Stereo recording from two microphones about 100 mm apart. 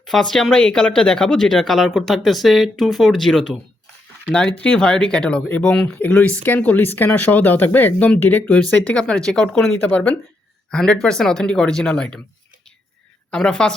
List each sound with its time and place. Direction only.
0.0 s speech: 5° left (ahead or behind)
13.3 s speech: 10° left (ahead or behind)